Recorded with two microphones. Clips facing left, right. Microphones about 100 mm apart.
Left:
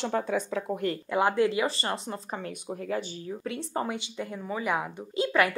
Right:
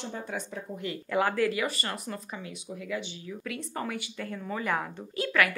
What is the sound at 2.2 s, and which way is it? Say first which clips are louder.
Speech: left 5 dB; 50° left (ahead or behind).